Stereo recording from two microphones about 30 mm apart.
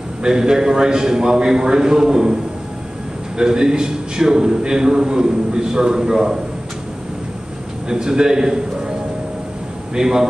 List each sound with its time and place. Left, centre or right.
0.2 s a man's voice: right
3.3 s a man's voice: right
7.9 s a man's voice: right
9.9 s a man's voice: right